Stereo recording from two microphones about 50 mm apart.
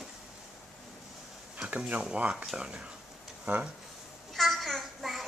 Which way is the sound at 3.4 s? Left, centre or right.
Right.